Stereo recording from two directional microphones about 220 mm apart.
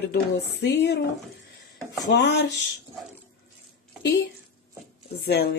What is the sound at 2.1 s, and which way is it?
Speech, 50° left (ahead or behind).